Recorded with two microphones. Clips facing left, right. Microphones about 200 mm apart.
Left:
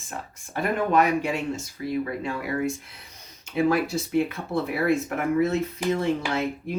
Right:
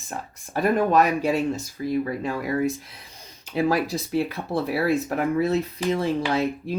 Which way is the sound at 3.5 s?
35° right (ahead or behind).